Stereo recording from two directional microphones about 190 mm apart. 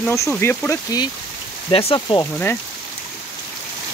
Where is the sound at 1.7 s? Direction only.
30° left (ahead or behind).